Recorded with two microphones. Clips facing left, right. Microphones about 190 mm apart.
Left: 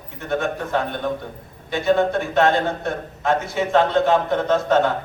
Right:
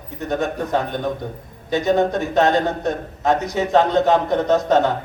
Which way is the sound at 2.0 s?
40° right (ahead or behind).